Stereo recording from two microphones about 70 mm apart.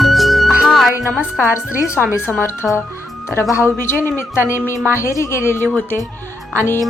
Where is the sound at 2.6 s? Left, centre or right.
Centre.